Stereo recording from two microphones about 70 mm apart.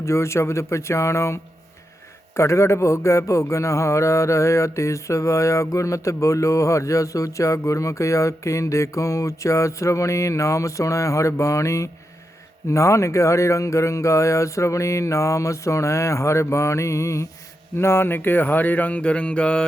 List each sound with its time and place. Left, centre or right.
0.0 s a man's voice: left; by 19.6 s centre